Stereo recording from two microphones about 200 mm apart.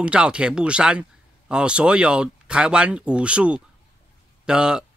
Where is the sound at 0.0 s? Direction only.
5° right (ahead or behind).